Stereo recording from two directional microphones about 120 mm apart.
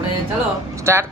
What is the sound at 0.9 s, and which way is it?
Speech, 20° right (ahead or behind).